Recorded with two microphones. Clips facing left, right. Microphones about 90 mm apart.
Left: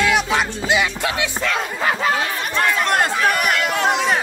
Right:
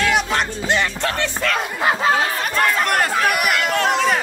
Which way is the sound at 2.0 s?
35° right (ahead or behind).